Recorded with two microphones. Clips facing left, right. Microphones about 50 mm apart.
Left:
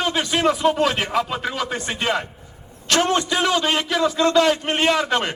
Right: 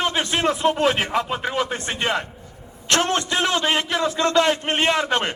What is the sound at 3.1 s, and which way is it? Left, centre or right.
A man's voice, right.